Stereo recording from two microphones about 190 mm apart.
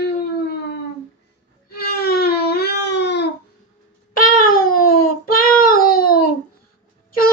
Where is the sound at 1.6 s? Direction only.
55° left (ahead or behind).